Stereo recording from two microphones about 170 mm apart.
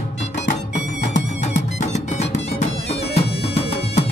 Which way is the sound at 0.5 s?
45° left (ahead or behind).